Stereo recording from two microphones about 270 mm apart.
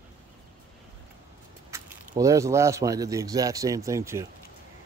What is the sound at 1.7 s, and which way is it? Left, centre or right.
A man's voice, centre.